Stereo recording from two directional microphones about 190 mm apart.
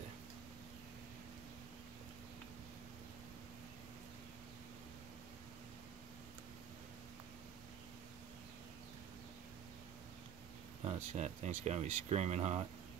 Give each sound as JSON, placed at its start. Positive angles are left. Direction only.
{"t": 10.9, "sound": "speech", "side_deg": -35}